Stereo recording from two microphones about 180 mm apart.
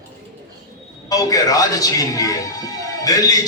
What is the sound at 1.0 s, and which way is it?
A man's voice, 20° left (ahead or behind).